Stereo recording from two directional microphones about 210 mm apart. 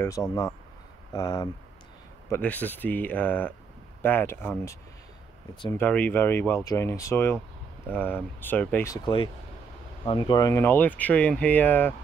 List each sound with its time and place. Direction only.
0.3 s speech: 15° left (ahead or behind)